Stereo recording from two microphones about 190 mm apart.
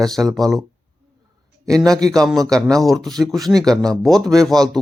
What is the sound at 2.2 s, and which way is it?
A man's voice, centre (ahead or behind).